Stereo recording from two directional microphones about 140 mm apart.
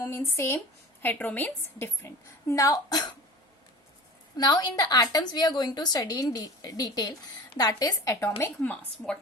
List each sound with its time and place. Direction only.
0.0 s a woman's voice: 15° left (ahead or behind)
4.4 s a woman's voice: 30° left (ahead or behind); by 9.1 s 10° left (ahead or behind)